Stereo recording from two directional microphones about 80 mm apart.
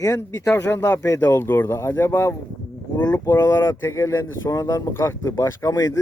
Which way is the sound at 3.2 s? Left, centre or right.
Left.